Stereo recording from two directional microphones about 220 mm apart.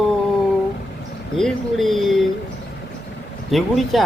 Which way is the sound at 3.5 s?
Centre (ahead or behind).